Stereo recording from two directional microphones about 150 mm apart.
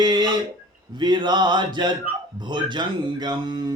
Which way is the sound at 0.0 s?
30° right (ahead or behind).